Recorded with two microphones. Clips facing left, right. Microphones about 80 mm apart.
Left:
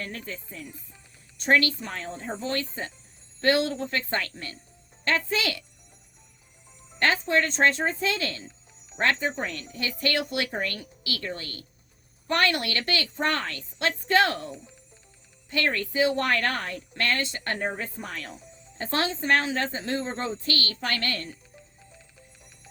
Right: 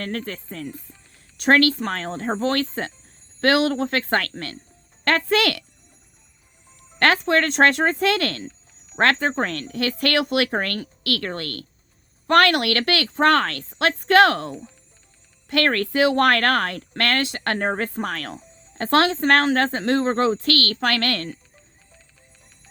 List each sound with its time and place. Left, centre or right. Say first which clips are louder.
0.0 s speech: right 7 dB; right
7.0 s speech: right 5 dB; right